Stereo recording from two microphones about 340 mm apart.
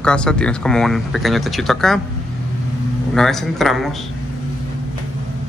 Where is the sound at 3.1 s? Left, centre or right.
Centre.